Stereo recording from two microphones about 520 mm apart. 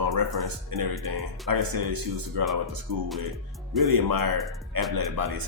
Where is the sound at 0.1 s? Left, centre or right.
Right.